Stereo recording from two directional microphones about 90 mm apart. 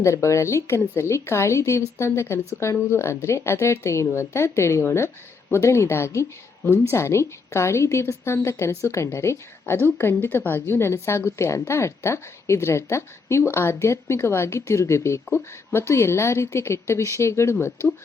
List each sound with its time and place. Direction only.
0.0 s a woman's voice: 35° left (ahead or behind)